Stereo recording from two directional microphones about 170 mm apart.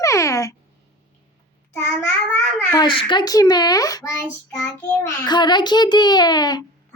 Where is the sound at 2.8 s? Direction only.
30° left (ahead or behind).